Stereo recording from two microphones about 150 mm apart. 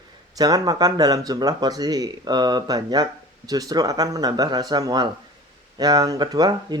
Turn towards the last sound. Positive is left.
turn(degrees=-25)  # may be behind; listen again after turning